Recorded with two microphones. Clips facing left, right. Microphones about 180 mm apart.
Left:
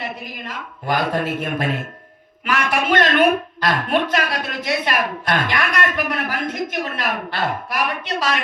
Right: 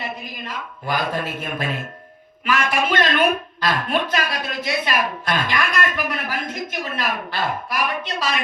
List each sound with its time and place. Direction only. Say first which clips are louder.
0.5 s a woman's voice: left 3 dB; 60° left (ahead or behind)